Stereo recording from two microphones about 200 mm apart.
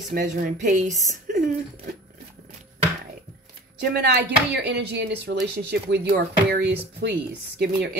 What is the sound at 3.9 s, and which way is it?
Speech, 55° right (ahead or behind).